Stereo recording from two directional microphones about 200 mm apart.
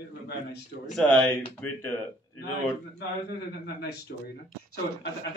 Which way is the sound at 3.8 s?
55° left (ahead or behind).